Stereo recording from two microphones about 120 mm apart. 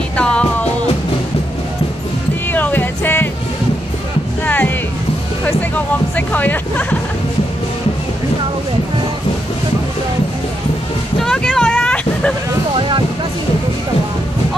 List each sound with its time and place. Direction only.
0.2 s music: 10° left (ahead or behind)
2.5 s music: 15° left (ahead or behind)
4.5 s music: 15° left (ahead or behind)
6.1 s music: 15° left (ahead or behind)
11.1 s vehicle: 5° left (ahead or behind)